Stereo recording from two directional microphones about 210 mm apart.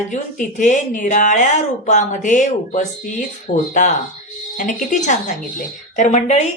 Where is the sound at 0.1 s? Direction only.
35° left (ahead or behind).